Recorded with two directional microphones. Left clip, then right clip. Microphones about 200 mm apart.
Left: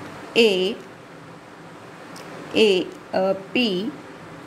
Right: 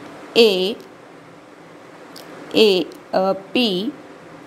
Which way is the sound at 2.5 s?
20° right (ahead or behind).